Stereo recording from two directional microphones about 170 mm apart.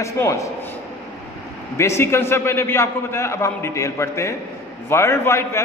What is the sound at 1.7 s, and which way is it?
A man's voice, 15° left (ahead or behind).